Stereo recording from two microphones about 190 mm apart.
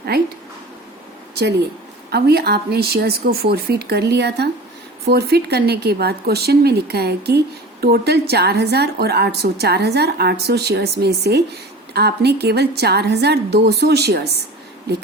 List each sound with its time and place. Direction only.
0.1 s speech: 55° right (ahead or behind)
2.0 s speech: 60° right (ahead or behind)